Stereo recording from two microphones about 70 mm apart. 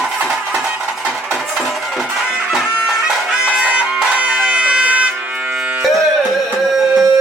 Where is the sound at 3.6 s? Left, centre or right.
Centre.